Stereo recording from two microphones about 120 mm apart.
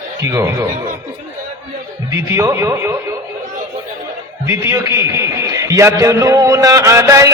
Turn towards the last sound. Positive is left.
turn(degrees=-25)  # may be behind; listen again after turning